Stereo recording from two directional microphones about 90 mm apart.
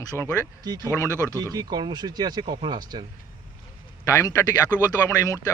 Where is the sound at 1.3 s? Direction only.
45° right (ahead or behind).